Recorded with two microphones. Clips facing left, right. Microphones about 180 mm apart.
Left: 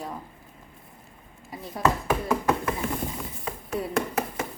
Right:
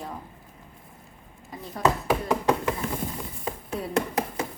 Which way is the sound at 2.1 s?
15° right (ahead or behind).